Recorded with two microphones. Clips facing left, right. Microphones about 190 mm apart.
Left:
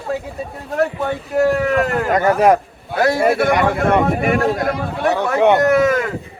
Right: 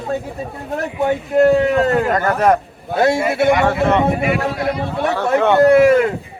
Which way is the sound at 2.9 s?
25° right (ahead or behind).